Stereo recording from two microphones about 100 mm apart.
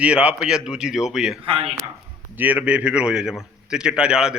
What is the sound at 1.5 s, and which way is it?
Speech, 65° right (ahead or behind).